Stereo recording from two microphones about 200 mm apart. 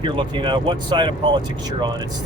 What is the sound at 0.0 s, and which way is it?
Speech, 25° right (ahead or behind).